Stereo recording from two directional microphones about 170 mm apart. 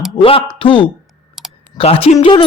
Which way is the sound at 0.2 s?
30° left (ahead or behind).